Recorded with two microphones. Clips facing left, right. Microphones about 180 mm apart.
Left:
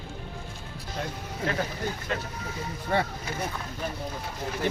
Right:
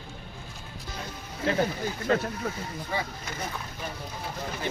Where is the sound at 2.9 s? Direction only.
60° left (ahead or behind).